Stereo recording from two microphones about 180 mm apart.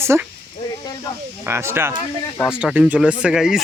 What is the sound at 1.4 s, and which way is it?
Speech, 15° right (ahead or behind).